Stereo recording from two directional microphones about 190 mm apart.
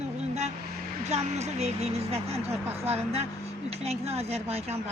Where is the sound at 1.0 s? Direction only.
35° right (ahead or behind).